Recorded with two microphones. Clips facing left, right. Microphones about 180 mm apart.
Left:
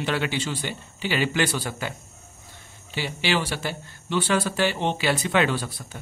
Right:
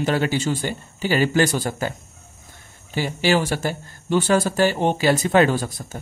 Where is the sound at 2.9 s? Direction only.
45° right (ahead or behind).